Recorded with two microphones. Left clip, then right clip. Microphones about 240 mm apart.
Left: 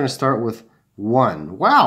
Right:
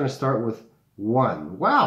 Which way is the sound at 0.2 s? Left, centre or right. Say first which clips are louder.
Left 6 dB; left.